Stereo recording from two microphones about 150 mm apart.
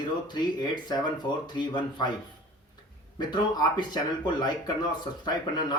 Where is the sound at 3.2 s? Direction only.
30° left (ahead or behind).